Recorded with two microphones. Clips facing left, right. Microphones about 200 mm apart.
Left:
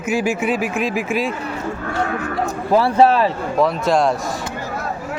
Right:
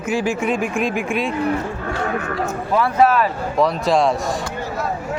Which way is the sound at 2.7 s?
30° left (ahead or behind).